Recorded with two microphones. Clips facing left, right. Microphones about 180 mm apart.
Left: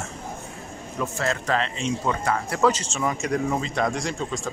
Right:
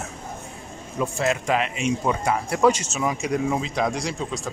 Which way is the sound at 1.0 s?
15° right (ahead or behind).